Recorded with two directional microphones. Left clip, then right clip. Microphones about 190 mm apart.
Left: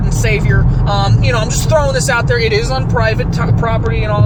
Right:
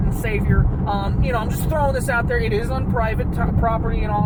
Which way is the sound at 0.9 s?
25° left (ahead or behind).